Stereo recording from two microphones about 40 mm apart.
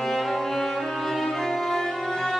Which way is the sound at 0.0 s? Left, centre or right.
Centre.